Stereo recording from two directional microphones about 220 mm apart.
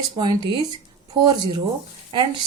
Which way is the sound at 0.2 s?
20° right (ahead or behind).